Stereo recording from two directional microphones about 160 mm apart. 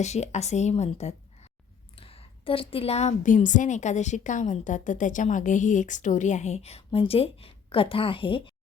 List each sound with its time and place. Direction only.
0.0 s a woman's voice: 45° left (ahead or behind)